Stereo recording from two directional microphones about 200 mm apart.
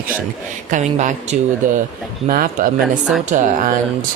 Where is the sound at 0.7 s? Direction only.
40° right (ahead or behind).